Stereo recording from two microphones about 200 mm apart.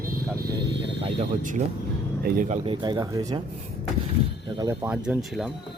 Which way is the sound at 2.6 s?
25° right (ahead or behind).